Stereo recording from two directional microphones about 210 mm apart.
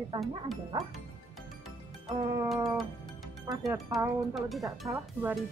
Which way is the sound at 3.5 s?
20° right (ahead or behind).